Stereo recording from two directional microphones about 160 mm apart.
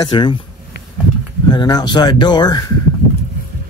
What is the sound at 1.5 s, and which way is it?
Speech, 25° left (ahead or behind).